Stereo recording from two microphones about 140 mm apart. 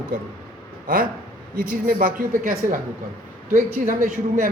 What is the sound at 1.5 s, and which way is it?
A woman's voice, 85° right.